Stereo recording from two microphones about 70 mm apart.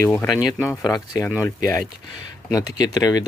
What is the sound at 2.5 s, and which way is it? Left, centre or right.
Speech, left.